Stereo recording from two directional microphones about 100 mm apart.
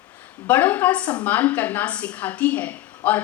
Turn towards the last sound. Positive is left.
turn(degrees=15)  # may be behind; listen again after turning